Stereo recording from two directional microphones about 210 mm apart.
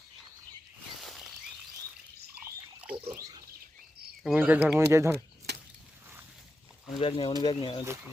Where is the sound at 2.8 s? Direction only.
10° right (ahead or behind).